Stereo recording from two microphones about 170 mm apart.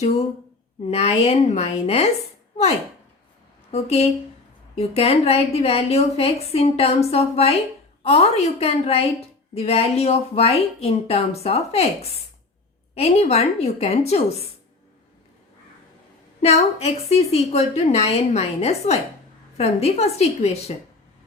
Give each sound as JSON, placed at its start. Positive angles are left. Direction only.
{"t": 0.9, "sound": "a woman's voice", "side_deg": 40}
{"t": 3.7, "sound": "a woman's voice", "side_deg": 40}
{"t": 16.4, "sound": "a woman's voice", "side_deg": 40}